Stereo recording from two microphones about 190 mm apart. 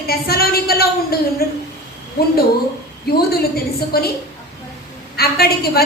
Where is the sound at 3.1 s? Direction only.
55° left (ahead or behind).